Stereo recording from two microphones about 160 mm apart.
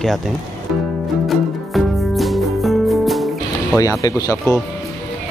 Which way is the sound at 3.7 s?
20° left (ahead or behind).